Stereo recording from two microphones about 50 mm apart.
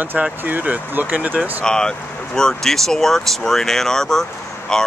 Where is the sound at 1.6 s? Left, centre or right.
Centre.